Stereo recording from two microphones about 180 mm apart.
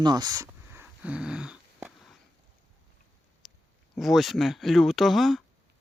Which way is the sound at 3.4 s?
Centre (ahead or behind).